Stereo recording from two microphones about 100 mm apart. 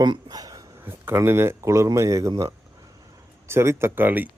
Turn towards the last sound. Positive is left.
turn(degrees=-20)  # may be behind; listen again after turning